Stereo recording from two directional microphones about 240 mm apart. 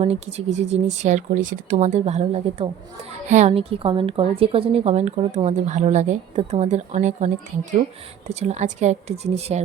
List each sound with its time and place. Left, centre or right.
0.0 s speech: right